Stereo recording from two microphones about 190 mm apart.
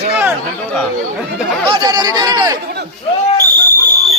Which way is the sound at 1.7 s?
20° right (ahead or behind).